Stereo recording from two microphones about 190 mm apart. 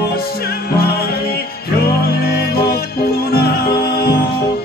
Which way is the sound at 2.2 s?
55° left (ahead or behind).